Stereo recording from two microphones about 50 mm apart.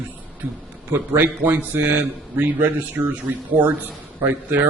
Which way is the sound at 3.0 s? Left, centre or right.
Right.